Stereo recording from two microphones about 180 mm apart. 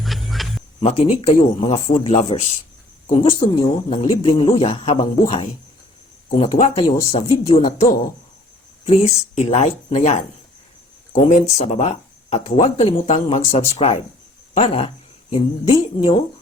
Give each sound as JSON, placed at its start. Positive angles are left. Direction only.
{"t": 0.0, "sound": "a sound", "side_deg": 0}
{"t": 0.8, "sound": "speech", "side_deg": 35}
{"t": 6.3, "sound": "speech", "side_deg": 35}